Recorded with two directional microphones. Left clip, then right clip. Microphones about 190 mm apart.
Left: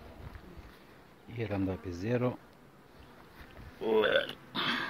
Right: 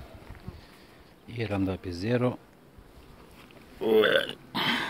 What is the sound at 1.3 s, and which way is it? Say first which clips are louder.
Speech: right 4 dB; 15° right (ahead or behind).